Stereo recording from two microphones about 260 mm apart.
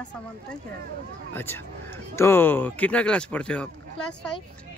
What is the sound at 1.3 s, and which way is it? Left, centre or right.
Speech, centre.